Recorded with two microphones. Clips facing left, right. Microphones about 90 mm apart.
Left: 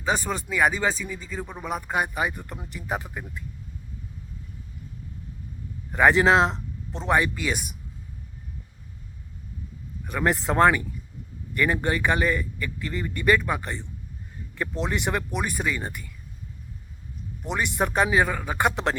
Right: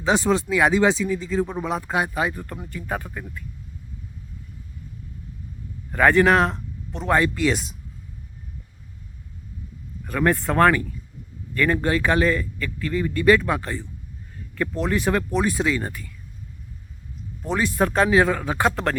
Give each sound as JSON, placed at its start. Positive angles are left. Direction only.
{"t": 0.0, "sound": "speech", "side_deg": 5}
{"t": 2.3, "sound": "speech", "side_deg": 15}
{"t": 5.9, "sound": "speech", "side_deg": 20}
{"t": 7.1, "sound": "speech", "side_deg": 10}
{"t": 10.1, "sound": "speech", "side_deg": 15}
{"t": 17.4, "sound": "speech", "side_deg": 15}